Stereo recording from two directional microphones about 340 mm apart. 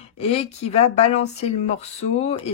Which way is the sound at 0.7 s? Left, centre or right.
Centre.